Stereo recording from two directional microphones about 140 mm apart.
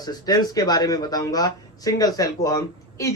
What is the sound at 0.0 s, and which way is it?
Speech, 30° left (ahead or behind).